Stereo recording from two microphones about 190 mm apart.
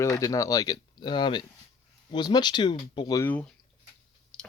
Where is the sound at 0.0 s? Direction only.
15° left (ahead or behind).